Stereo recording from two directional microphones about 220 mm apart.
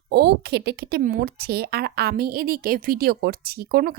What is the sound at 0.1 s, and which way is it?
Speech, 45° right (ahead or behind).